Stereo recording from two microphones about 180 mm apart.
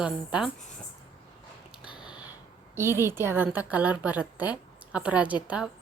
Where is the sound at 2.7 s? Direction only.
15° right (ahead or behind).